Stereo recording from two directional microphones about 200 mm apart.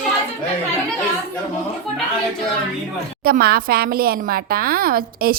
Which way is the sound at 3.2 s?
50° right (ahead or behind).